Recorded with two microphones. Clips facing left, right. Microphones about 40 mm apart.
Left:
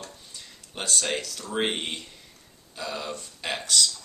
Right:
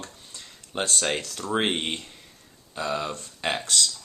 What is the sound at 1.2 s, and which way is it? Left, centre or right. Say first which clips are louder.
Speech: right 4 dB; right.